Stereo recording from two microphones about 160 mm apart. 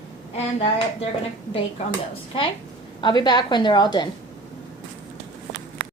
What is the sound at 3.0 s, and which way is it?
A woman's voice, 25° left (ahead or behind).